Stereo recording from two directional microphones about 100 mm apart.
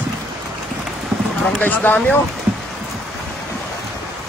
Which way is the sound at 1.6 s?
15° left (ahead or behind).